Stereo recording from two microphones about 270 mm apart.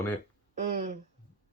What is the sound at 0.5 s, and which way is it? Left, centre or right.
Speech, right.